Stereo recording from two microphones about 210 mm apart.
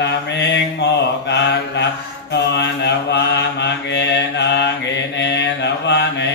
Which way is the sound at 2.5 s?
55° left (ahead or behind).